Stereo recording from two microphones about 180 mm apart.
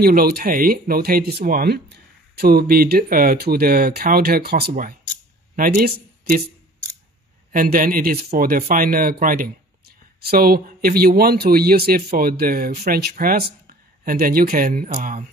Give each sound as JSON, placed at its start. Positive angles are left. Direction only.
{"t": 0.0, "sound": "speech", "side_deg": -55}
{"t": 7.5, "sound": "speech", "side_deg": -50}